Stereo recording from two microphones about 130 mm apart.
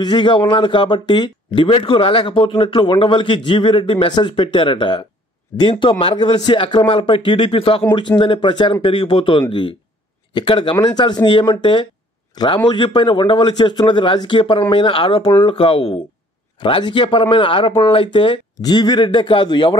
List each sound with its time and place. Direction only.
0.0 s speech: 35° left (ahead or behind)